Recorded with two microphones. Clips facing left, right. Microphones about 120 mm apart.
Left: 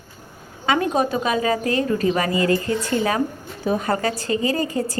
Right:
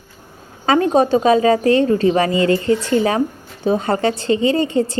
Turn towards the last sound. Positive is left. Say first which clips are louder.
# right 6 dB
turn(degrees=-25)  # may be behind; listen again after turning